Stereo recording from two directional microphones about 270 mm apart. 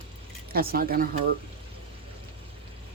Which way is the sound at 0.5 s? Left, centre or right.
Right.